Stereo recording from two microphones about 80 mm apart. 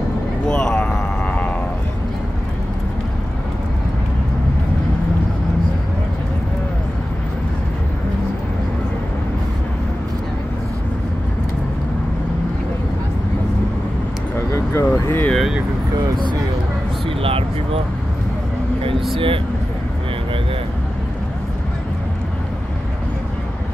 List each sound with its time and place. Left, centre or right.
0.5 s a sound: centre
14.3 s vehicle: left
19.1 s vehicle: right